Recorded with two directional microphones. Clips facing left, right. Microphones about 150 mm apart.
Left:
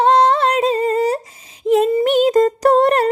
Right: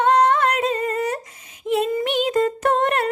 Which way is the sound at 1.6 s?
35° left (ahead or behind).